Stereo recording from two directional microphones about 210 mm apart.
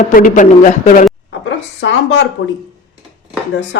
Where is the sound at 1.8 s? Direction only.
60° left (ahead or behind).